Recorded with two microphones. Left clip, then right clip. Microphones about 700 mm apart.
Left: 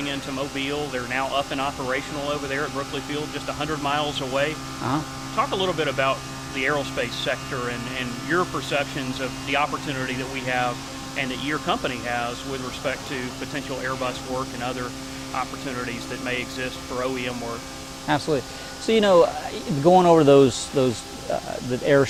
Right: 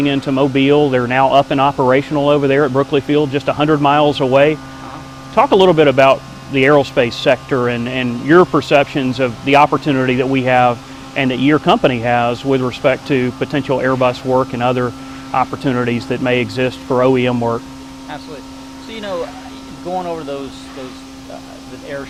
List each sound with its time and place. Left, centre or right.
0.0 s speech: right
18.9 s speech: left
21.9 s speech: left